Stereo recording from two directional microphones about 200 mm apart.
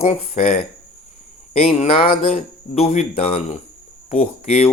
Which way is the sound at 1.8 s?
30° left (ahead or behind).